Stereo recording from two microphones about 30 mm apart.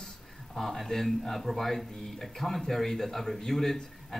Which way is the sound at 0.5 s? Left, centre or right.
Centre.